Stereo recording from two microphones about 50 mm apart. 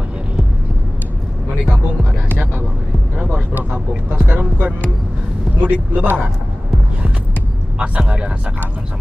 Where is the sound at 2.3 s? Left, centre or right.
Right.